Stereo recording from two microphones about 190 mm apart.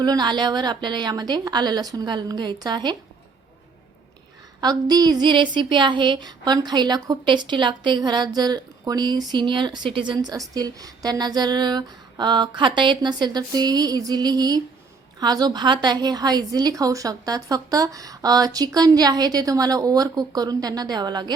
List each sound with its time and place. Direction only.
0.0 s a woman's voice: 20° right (ahead or behind)
4.6 s a woman's voice: 20° right (ahead or behind)